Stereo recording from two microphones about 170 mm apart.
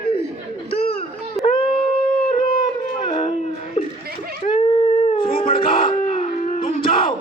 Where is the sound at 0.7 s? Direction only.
35° left (ahead or behind).